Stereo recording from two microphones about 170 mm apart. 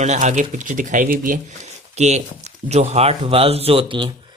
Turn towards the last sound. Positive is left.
turn(degrees=-30)  # may be behind; listen again after turning